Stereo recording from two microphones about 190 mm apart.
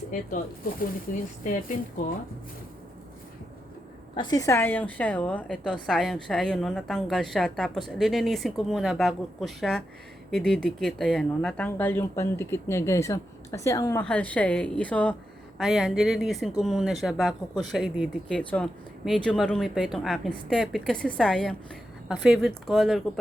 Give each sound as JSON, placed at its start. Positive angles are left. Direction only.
{"t": 0.6, "sound": "speech", "side_deg": 50}
{"t": 4.1, "sound": "speech", "side_deg": 20}